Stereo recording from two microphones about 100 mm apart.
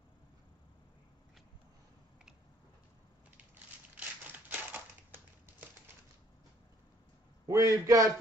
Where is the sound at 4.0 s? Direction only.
15° right (ahead or behind).